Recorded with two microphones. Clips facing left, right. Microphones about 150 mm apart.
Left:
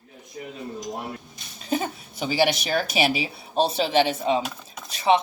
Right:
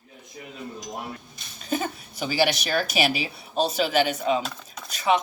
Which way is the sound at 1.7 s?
25° left (ahead or behind).